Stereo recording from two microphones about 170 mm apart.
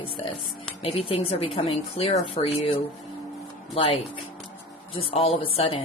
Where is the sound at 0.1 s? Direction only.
30° left (ahead or behind).